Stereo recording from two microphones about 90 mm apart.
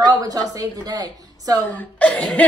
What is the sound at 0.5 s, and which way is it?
A woman's voice, 45° right (ahead or behind).